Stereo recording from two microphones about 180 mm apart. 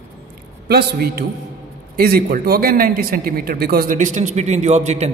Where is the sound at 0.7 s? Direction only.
60° right (ahead or behind).